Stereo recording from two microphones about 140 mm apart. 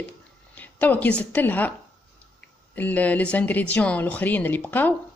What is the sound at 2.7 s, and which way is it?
Speech, 10° left (ahead or behind).